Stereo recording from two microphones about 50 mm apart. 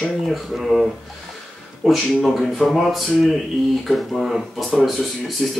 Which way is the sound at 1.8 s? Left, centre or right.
Centre.